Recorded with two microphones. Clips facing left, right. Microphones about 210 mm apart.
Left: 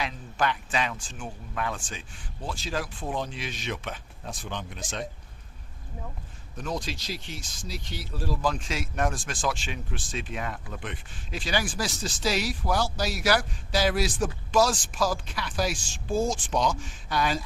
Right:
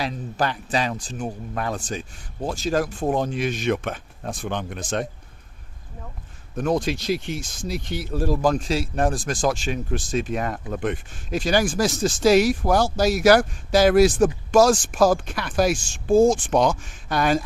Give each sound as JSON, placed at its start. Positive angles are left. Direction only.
{"t": 0.0, "sound": "speech", "side_deg": -35}
{"t": 6.6, "sound": "speech", "side_deg": -55}